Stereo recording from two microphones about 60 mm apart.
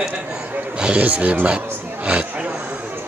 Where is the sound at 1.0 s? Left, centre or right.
Right.